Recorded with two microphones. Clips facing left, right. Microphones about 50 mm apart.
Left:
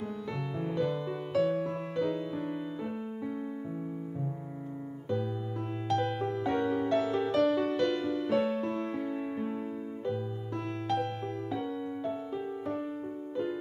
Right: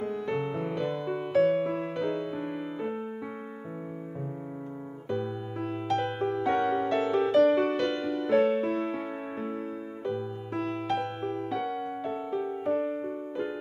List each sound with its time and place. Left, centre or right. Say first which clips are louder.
0.0 s music: right 6 dB; right
5.9 s music: right 1 dB; right